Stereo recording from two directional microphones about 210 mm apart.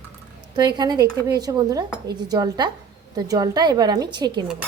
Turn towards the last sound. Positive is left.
turn(degrees=-20)  # may be behind; listen again after turning